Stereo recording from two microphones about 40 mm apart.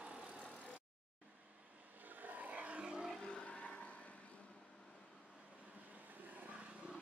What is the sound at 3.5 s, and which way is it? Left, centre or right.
Vehicle, left.